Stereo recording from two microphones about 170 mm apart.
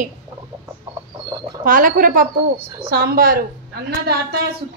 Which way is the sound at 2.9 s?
65° right (ahead or behind).